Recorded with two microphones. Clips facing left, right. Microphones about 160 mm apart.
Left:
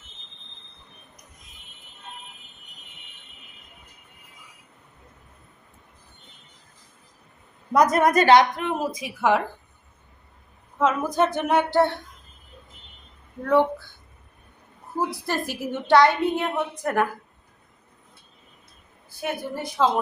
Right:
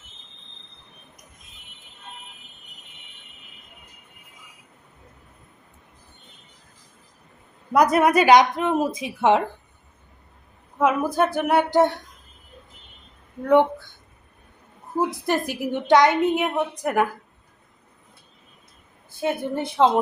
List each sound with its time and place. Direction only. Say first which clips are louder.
7.7 s a woman's voice: right 1 dB; 10° right (ahead or behind); by 9.4 s 25° right (ahead or behind)
10.8 s a woman's voice: right 1 dB; 10° right (ahead or behind)
13.5 s a woman's voice: right 3 dB; 20° right (ahead or behind)
14.9 s a woman's voice: right 4 dB; 20° right (ahead or behind)
19.2 s a woman's voice: right 5 dB; 25° right (ahead or behind)